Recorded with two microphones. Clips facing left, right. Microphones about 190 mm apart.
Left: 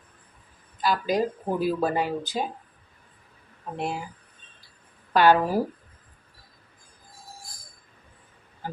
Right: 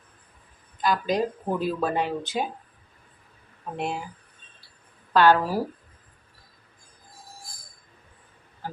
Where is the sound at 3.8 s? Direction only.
Centre (ahead or behind).